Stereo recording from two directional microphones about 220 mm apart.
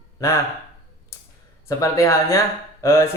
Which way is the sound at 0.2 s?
15° left (ahead or behind).